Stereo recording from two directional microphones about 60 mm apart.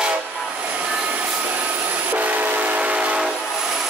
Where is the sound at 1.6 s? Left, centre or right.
Right.